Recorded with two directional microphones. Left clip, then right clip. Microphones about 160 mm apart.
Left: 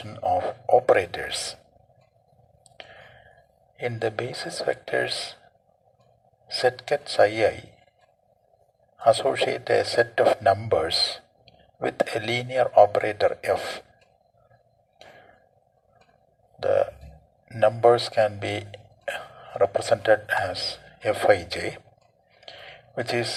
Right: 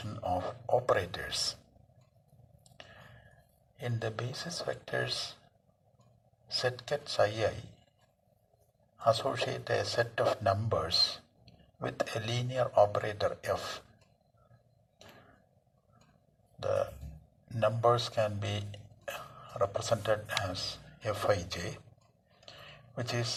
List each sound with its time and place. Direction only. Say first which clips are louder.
0.0 s speech: left 10 dB; 40° left (ahead or behind)
2.6 s a sound: left 8 dB; 40° left (ahead or behind)
3.8 s a man's voice: left 11 dB; 45° left (ahead or behind)
6.5 s a man's voice: left 10 dB; 40° left (ahead or behind)
9.0 s a man's voice: left 9 dB; 40° left (ahead or behind)
16.6 s a man's voice: left 10 dB; 40° left (ahead or behind)
22.4 s a sound: left 8 dB; 45° left (ahead or behind)